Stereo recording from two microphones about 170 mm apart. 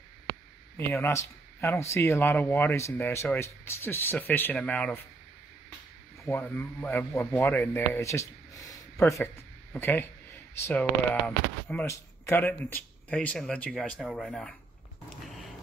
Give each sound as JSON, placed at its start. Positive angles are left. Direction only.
{"t": 0.7, "sound": "speech", "side_deg": 15}
{"t": 6.2, "sound": "speech", "side_deg": 10}